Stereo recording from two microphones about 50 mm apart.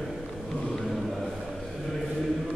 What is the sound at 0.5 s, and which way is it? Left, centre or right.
Chant, centre.